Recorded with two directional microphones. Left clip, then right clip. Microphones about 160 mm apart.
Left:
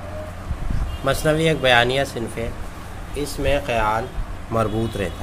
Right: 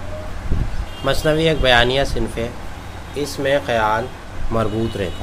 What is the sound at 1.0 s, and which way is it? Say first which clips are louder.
Speech: right 2 dB; 15° left (ahead or behind).